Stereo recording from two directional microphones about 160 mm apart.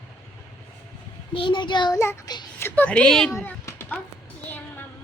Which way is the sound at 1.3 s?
30° left (ahead or behind).